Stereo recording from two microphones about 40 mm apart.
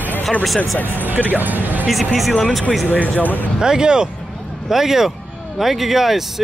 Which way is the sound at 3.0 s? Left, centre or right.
Left.